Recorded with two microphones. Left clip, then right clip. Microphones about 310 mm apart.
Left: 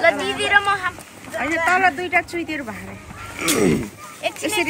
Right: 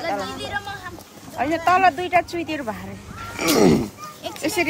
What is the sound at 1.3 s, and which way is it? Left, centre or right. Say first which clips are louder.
Speech: even; right.